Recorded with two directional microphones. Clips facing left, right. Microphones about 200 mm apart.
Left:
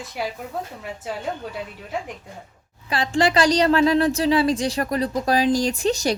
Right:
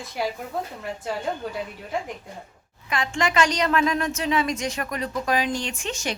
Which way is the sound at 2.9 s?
35° left (ahead or behind).